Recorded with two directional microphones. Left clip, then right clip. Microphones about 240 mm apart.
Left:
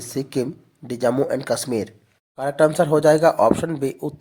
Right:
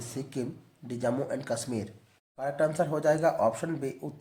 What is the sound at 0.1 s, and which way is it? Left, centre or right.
Speech, left.